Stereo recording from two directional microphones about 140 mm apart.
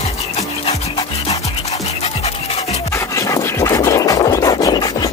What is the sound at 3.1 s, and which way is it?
Music, 25° left (ahead or behind).